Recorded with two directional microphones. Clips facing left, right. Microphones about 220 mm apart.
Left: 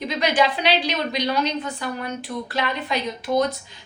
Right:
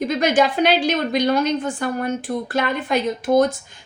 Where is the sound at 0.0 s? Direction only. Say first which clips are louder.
Right 4 dB; 45° right (ahead or behind).